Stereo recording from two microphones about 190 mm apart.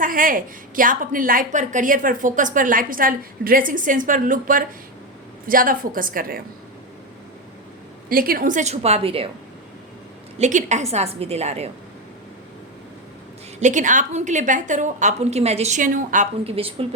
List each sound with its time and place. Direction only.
0.0 s a woman's voice: 45° right (ahead or behind)
8.1 s a woman's voice: 50° right (ahead or behind); by 9.3 s 30° right (ahead or behind)
10.3 s a woman's voice: 40° right (ahead or behind)
13.6 s a woman's voice: 40° right (ahead or behind)